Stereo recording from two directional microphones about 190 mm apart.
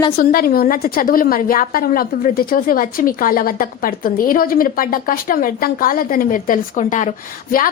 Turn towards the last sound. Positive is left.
turn(degrees=45)  # may be behind; listen again after turning